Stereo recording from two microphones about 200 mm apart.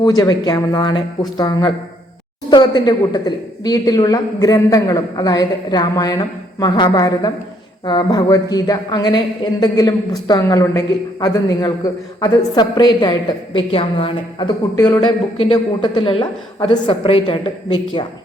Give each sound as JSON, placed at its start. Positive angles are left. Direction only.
{"t": 0.0, "sound": "a woman's voice", "side_deg": 20}